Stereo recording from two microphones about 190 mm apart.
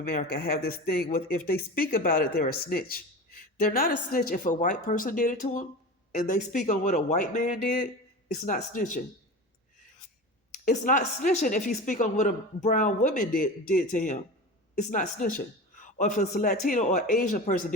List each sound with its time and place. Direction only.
0.1 s speech: 55° left (ahead or behind)
10.7 s a woman's voice: 45° left (ahead or behind)